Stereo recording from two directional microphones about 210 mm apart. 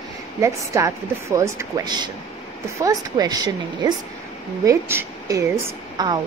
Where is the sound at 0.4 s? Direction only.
15° right (ahead or behind).